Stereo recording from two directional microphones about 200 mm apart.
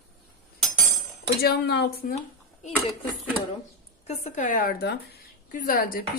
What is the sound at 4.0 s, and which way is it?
Speech, 35° left (ahead or behind).